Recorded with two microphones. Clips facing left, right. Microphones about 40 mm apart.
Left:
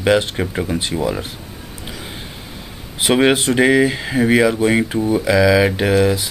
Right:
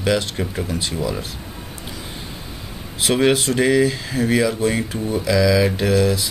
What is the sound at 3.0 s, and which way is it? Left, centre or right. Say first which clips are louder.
Speech: left 3 dB; left.